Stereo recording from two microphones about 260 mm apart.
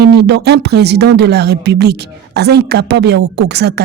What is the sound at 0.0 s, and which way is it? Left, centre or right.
Speech, right.